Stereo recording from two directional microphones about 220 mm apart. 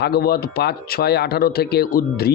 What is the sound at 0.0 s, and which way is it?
Speech, 45° left (ahead or behind).